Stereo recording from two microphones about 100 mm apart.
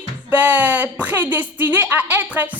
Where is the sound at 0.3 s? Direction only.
15° right (ahead or behind).